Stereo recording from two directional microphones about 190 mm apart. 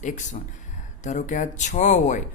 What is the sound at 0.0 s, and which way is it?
A man's voice, 40° left (ahead or behind).